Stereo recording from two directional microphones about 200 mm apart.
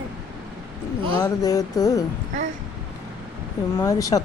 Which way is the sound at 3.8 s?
15° left (ahead or behind).